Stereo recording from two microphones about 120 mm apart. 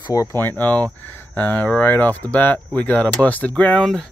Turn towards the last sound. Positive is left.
turn(degrees=5)  # may be behind; listen again after turning